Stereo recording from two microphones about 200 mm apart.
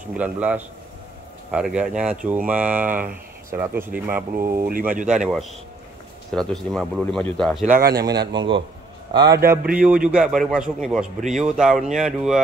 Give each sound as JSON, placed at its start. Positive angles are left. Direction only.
{"t": 0.2, "sound": "a man's voice", "side_deg": -10}
{"t": 7.7, "sound": "speech", "side_deg": -50}
{"t": 8.0, "sound": "a man's voice", "side_deg": -20}